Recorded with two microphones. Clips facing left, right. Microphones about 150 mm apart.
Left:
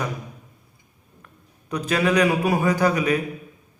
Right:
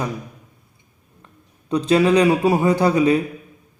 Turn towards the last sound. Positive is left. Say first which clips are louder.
# right 4 dB
turn(degrees=-25)  # may be behind; listen again after turning